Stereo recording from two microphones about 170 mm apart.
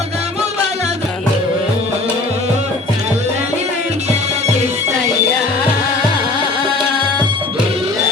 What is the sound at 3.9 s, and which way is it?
Music, 40° right (ahead or behind).